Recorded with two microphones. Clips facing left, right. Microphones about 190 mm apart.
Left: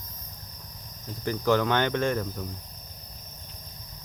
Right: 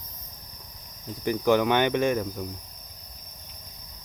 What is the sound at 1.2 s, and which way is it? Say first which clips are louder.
Cricket: right 2 dB; 15° right (ahead or behind).